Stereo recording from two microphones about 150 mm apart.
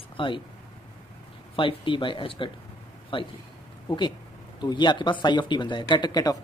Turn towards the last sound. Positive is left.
turn(degrees=25)  # may be behind; listen again after turning